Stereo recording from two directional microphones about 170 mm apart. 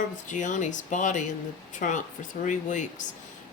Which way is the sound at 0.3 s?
45° left (ahead or behind).